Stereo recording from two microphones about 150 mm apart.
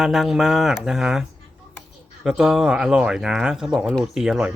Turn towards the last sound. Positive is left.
turn(degrees=-5)  # may be behind; listen again after turning